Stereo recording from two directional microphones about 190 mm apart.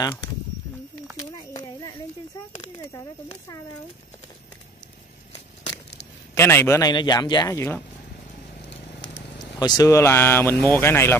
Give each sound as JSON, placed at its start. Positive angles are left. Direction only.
{"t": 0.0, "sound": "speech", "side_deg": 20}
{"t": 6.3, "sound": "speech", "side_deg": 15}
{"t": 9.6, "sound": "speech", "side_deg": 20}